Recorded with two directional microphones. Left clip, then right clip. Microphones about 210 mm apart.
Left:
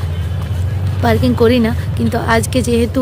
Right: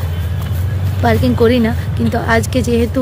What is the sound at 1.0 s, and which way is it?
A woman's voice, 10° left (ahead or behind).